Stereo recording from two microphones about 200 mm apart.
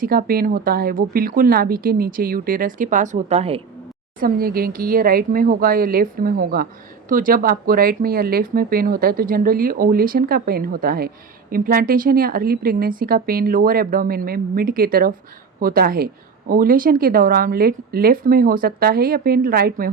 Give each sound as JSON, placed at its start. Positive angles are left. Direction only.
{"t": 0.0, "sound": "speech", "side_deg": -45}
{"t": 4.2, "sound": "speech", "side_deg": -45}